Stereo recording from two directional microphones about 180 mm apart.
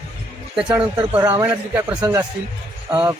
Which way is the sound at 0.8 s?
25° right (ahead or behind).